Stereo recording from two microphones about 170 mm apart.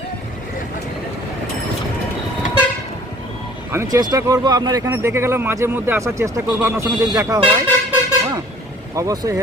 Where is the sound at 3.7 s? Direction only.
20° right (ahead or behind).